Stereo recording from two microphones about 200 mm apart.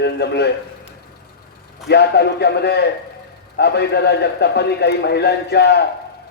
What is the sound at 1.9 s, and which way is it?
A man's voice, 55° left (ahead or behind).